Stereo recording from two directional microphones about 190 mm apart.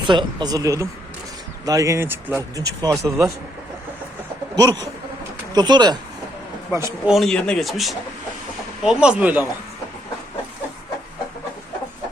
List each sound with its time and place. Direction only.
0.1 s speech: 25° right (ahead or behind)
4.5 s speech: 20° right (ahead or behind)
6.7 s speech: 10° right (ahead or behind)
7.1 s speech: centre (ahead or behind)